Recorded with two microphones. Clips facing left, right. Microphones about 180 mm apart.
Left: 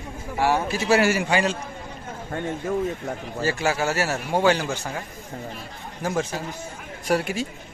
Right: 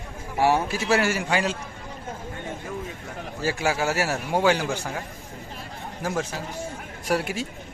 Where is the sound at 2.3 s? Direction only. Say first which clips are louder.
Left 11 dB; 45° left (ahead or behind).